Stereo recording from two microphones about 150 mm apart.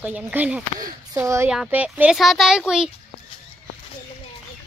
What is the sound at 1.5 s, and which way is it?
Speech, 5° right (ahead or behind).